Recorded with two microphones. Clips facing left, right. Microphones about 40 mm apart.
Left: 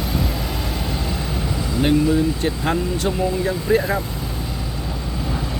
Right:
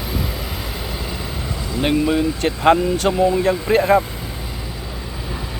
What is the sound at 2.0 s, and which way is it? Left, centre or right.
Speech, right.